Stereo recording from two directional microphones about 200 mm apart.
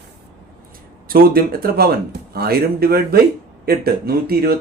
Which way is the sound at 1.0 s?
45° right (ahead or behind).